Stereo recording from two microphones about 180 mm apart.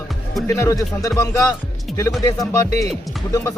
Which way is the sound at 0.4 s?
20° left (ahead or behind).